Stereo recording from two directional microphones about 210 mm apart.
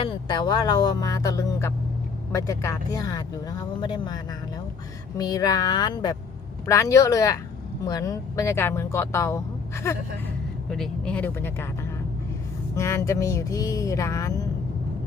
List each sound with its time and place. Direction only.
0.0 s speech: 20° left (ahead or behind)
10.7 s speech: centre (ahead or behind)